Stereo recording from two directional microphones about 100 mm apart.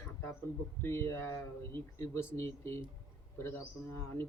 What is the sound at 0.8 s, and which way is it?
A man's voice, 25° left (ahead or behind).